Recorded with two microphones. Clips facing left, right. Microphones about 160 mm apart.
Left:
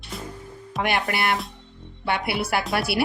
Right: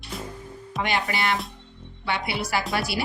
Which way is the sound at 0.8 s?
60° left (ahead or behind).